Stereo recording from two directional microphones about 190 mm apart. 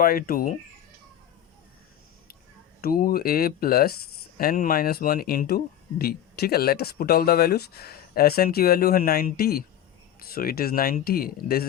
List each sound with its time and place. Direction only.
0.0 s speech: 50° left (ahead or behind)
2.8 s speech: 50° left (ahead or behind)